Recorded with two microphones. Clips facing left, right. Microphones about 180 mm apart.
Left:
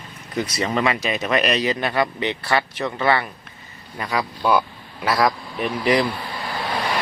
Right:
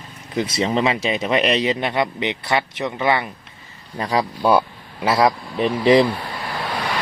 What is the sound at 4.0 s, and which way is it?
Speech, 30° right (ahead or behind).